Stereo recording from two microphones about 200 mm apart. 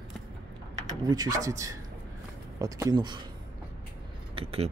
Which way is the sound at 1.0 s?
20° right (ahead or behind).